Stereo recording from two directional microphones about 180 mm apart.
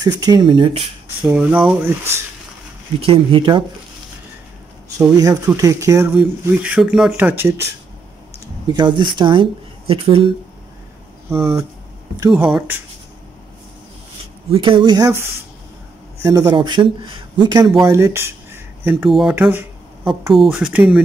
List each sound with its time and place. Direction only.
0.0 s speech: 20° right (ahead or behind)
1.2 s speech: 5° right (ahead or behind)
3.0 s speech: 30° right (ahead or behind)
4.9 s speech: 20° right (ahead or behind)
6.1 s speech: 5° right (ahead or behind)
8.7 s speech: 25° right (ahead or behind)
12.3 s speech: 5° right (ahead or behind)
14.5 s speech: 30° right (ahead or behind); by 21.0 s 5° right (ahead or behind)